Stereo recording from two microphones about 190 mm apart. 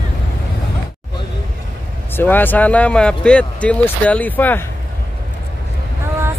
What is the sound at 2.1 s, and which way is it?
Speech, 10° left (ahead or behind).